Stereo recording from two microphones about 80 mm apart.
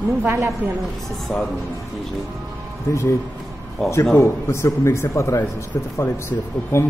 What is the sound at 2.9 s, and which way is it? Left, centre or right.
Speech, left.